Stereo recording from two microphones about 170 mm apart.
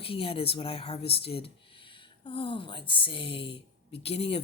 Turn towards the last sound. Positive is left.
turn(degrees=35)  # may be behind; listen again after turning